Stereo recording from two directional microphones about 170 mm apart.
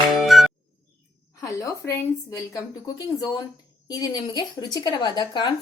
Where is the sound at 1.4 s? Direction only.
20° left (ahead or behind).